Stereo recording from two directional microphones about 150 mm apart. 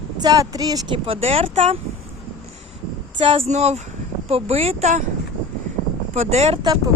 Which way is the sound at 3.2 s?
35° right (ahead or behind).